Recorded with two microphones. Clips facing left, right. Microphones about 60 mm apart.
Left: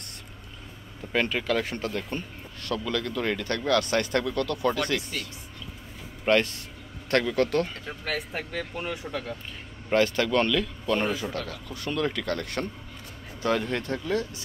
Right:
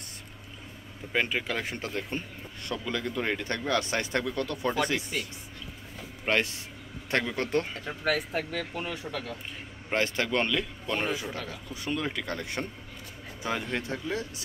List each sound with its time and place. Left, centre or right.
1.1 s speech: centre
8.1 s speech: centre
9.8 s speech: centre